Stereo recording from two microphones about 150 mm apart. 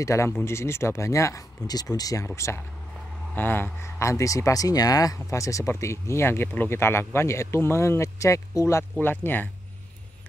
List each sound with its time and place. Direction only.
0.0 s speech: 20° left (ahead or behind)